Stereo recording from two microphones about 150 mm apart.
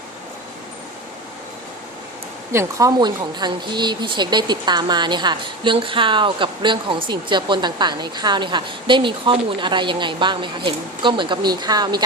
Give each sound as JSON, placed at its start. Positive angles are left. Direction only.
{"t": 2.5, "sound": "speech", "side_deg": -20}